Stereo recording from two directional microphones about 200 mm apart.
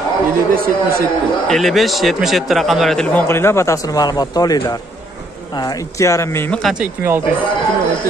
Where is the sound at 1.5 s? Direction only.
Centre (ahead or behind).